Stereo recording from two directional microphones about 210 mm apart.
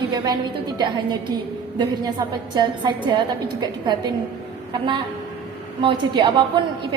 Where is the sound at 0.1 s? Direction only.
20° right (ahead or behind).